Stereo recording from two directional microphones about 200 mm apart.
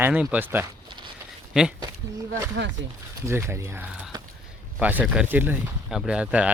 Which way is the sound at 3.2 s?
15° right (ahead or behind).